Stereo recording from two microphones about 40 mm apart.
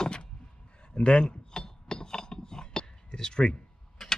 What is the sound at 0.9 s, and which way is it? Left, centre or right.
Filing, left.